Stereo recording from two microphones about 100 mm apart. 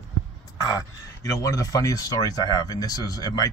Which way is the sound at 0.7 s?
30° left (ahead or behind).